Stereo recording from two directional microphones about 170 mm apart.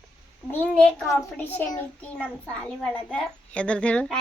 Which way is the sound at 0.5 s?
10° left (ahead or behind).